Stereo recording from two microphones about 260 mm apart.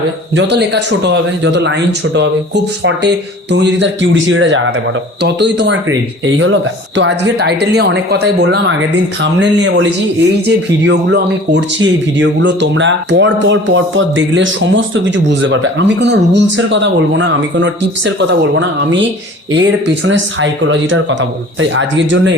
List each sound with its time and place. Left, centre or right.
0.3 s a woman's voice: right